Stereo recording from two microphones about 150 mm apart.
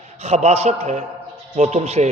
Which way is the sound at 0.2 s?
45° right (ahead or behind).